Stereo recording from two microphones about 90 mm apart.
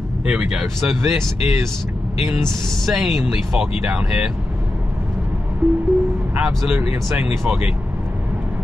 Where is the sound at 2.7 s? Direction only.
Centre (ahead or behind).